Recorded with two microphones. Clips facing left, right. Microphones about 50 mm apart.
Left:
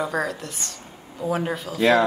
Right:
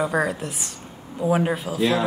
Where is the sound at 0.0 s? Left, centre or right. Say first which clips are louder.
Right 3 dB; centre.